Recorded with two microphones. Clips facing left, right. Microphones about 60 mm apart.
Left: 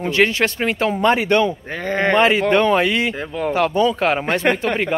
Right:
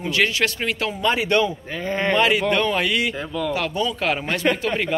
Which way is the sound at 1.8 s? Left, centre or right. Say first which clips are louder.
Left 4 dB; left.